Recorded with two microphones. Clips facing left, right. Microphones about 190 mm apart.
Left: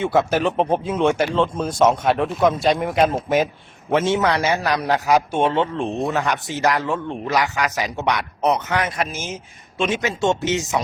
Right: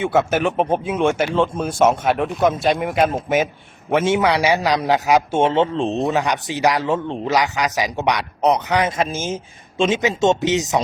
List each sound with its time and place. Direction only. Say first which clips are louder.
0.0 s a man's voice: right 1 dB; 5° right (ahead or behind)